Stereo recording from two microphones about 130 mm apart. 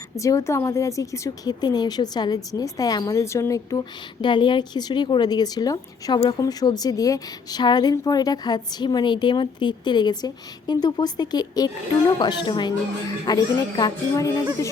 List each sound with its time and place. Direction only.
0.2 s speech: 25° left (ahead or behind)
4.2 s speech: 35° left (ahead or behind)